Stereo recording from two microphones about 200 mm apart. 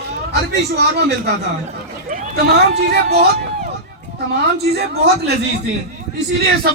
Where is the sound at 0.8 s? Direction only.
55° right (ahead or behind).